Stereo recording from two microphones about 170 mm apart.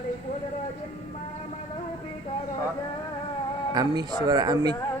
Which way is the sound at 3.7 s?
25° right (ahead or behind).